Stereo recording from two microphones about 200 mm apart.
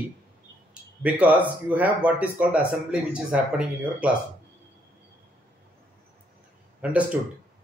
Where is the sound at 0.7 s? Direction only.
5° right (ahead or behind).